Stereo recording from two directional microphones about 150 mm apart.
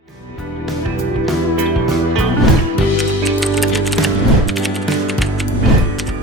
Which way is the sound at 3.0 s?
Centre (ahead or behind).